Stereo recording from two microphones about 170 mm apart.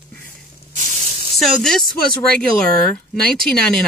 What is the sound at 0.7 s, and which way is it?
Spray, 45° right (ahead or behind).